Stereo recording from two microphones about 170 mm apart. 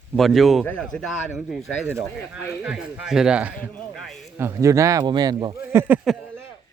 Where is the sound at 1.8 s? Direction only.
10° right (ahead or behind).